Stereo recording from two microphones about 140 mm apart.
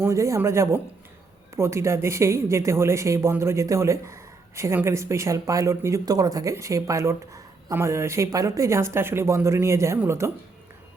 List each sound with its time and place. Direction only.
0.0 s speech: 20° right (ahead or behind)